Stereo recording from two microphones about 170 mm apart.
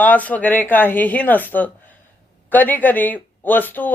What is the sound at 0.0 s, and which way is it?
Speech, 10° left (ahead or behind).